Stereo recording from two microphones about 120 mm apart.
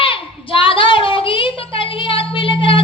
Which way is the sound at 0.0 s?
45° left (ahead or behind).